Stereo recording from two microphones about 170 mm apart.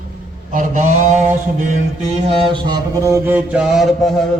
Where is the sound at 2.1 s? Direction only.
40° right (ahead or behind); by 4.1 s centre (ahead or behind).